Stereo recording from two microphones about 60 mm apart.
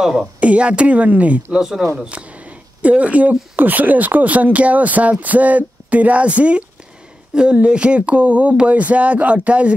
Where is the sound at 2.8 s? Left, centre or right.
Right.